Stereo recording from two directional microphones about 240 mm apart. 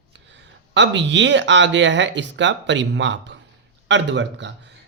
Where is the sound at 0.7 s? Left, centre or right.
Right.